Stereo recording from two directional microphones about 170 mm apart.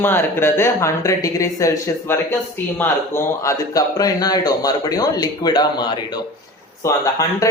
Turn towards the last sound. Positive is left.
turn(degrees=20)  # may be behind; listen again after turning